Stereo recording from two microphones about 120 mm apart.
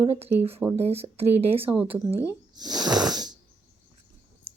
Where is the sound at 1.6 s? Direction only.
15° right (ahead or behind).